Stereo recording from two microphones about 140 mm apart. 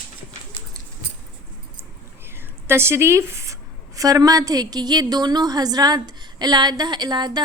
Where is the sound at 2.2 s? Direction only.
15° right (ahead or behind).